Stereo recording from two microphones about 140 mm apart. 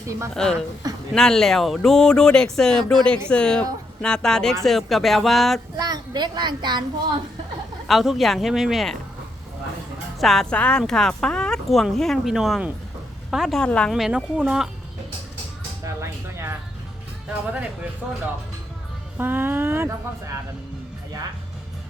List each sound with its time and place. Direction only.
0.0 s a woman's voice: 20° right (ahead or behind)
0.3 s speech: 5° left (ahead or behind)
5.7 s a child's voice: 30° right (ahead or behind)
7.9 s speech: centre (ahead or behind)
10.2 s speech: centre (ahead or behind)
16.0 s music: 20° right (ahead or behind)
17.2 s speech: 10° right (ahead or behind)
19.1 s speech: 15° right (ahead or behind)